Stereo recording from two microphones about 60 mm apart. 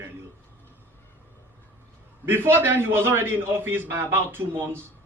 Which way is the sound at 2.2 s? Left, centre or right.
Right.